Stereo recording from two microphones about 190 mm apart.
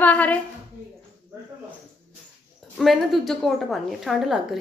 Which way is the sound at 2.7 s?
Centre (ahead or behind).